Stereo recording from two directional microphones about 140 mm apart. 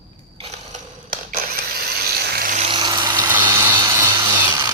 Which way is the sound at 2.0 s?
90° right.